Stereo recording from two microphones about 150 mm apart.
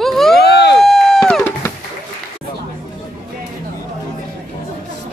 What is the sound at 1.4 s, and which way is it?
Music, 15° left (ahead or behind).